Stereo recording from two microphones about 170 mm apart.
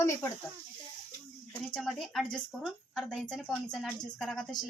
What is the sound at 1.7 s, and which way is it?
A woman's voice, centre (ahead or behind).